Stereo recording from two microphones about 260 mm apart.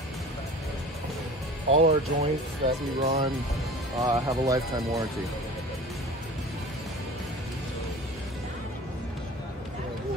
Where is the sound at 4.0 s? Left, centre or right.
Centre.